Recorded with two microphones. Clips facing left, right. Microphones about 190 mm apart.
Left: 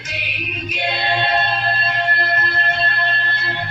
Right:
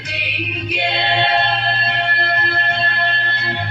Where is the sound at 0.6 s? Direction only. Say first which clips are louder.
Right 1 dB; 65° right (ahead or behind).